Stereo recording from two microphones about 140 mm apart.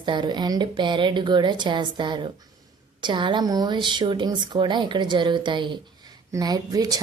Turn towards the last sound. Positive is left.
turn(degrees=-25)  # may be behind; listen again after turning